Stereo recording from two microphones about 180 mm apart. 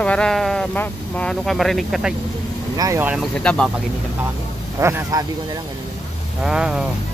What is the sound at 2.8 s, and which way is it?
Speech, 15° right (ahead or behind).